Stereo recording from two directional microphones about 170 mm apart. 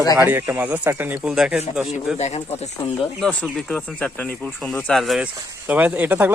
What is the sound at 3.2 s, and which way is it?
Speech, 5° left (ahead or behind).